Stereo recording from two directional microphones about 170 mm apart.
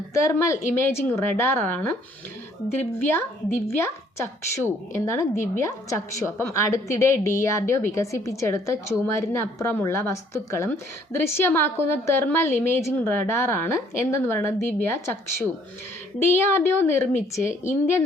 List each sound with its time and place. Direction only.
0.1 s a woman's voice: 20° left (ahead or behind)
3.0 s a woman's voice: 15° left (ahead or behind)